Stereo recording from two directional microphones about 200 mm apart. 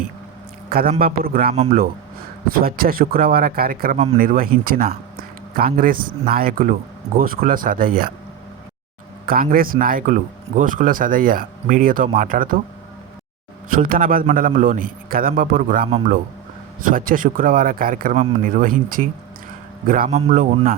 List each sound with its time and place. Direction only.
0.7 s speech: 50° right (ahead or behind)
9.2 s speech: 45° right (ahead or behind)
13.7 s a man's voice: 45° right (ahead or behind)